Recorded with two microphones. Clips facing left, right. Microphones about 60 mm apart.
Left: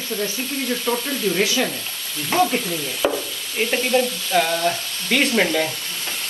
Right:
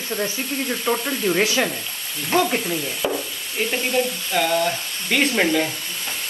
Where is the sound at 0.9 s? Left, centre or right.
Right.